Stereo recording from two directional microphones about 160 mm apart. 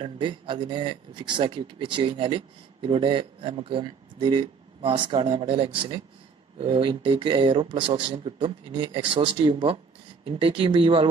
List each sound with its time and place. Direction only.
0.0 s speech: 30° right (ahead or behind)